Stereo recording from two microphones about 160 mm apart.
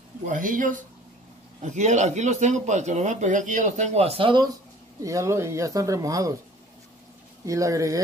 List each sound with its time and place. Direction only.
0.3 s a man's voice: 55° right (ahead or behind); by 4.5 s 30° right (ahead or behind)
5.0 s speech: 20° right (ahead or behind)
7.4 s speech: 20° right (ahead or behind)